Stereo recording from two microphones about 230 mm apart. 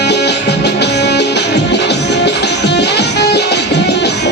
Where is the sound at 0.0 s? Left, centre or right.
Left.